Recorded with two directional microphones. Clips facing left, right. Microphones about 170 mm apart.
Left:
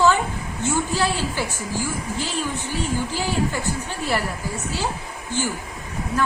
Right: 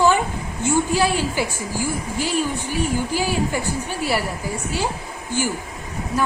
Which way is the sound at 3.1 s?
15° right (ahead or behind).